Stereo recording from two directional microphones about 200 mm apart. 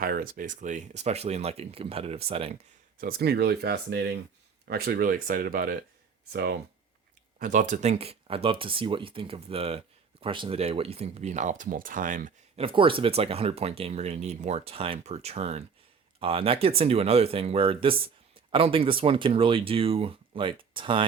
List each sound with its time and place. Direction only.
0.0 s speech: 45° right (ahead or behind); by 2.6 s 30° right (ahead or behind)
3.0 s speech: 50° right (ahead or behind)
7.3 s speech: 40° right (ahead or behind)
12.6 s speech: 25° right (ahead or behind)